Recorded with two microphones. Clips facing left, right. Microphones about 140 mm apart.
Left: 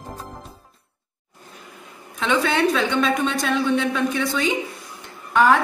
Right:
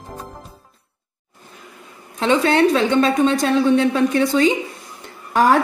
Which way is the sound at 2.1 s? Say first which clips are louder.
Right 5 dB; 25° right (ahead or behind).